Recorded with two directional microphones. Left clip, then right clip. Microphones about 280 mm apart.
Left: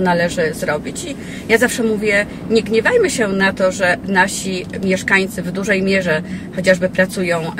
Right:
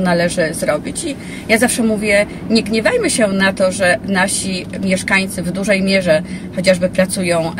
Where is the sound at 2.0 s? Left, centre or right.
Centre.